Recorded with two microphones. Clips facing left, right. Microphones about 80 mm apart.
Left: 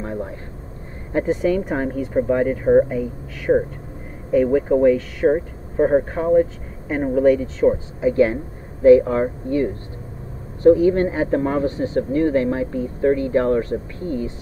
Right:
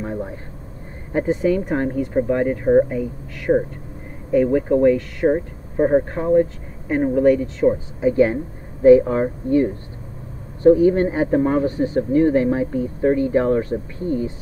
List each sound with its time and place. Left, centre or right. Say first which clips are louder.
0.0 s a sound: right 1 dB; centre
1.1 s speech: even; right
1.4 s speech: right 1 dB; centre
8.0 s speech: right 1 dB; right
10.6 s speech: even; right
11.2 s speech: right 2 dB; centre
11.6 s speech: right 1 dB; right